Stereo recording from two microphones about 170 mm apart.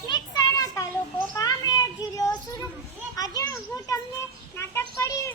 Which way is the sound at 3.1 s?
20° left (ahead or behind).